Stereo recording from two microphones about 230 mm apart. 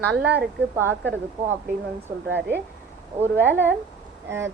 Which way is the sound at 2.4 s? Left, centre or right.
Right.